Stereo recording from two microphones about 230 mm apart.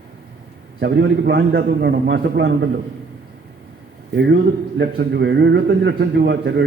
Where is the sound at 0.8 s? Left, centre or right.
Right.